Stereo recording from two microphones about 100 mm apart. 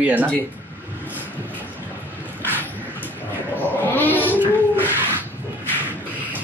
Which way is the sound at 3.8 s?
20° left (ahead or behind).